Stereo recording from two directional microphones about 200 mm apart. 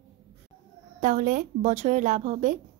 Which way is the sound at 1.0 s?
40° right (ahead or behind).